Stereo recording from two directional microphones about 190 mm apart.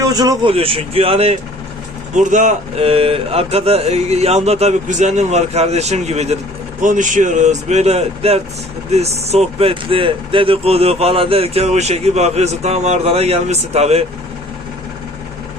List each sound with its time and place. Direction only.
0.0 s speech: 20° right (ahead or behind)
2.1 s speech: 40° right (ahead or behind)